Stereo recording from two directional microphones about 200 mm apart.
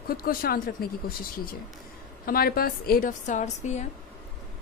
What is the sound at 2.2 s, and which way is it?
A woman's voice, 50° left (ahead or behind).